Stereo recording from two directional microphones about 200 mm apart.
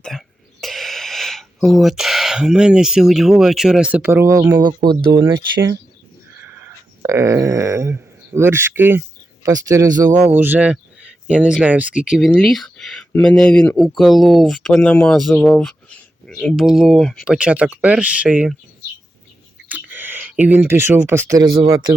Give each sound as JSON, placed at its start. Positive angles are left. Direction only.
{"t": 0.0, "sound": "a sound", "side_deg": 0}
{"t": 5.1, "sound": "speech", "side_deg": -20}
{"t": 19.6, "sound": "speech", "side_deg": -10}